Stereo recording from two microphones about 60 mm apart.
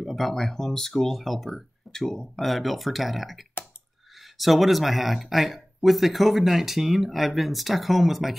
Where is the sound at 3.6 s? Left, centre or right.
Left.